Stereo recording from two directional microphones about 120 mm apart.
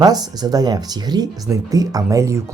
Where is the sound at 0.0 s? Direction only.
35° right (ahead or behind).